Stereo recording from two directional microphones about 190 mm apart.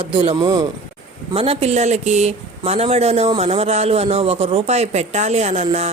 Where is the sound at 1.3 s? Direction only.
30° right (ahead or behind).